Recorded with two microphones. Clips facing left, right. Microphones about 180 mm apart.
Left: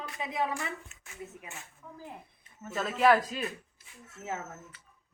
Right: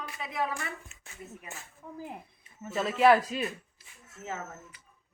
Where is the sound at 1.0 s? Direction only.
30° right (ahead or behind).